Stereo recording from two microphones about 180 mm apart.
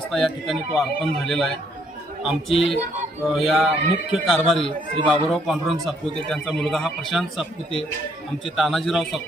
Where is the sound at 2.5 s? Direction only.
30° left (ahead or behind).